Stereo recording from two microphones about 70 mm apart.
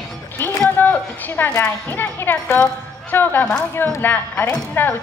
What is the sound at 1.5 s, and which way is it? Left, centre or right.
A woman's voice, left.